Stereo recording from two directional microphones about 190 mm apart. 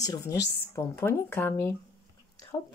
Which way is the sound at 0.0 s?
20° left (ahead or behind).